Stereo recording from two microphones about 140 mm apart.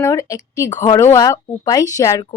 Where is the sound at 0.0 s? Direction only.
20° left (ahead or behind).